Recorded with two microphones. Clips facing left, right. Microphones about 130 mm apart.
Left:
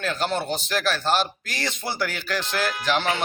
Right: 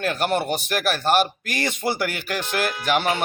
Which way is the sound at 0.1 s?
15° right (ahead or behind).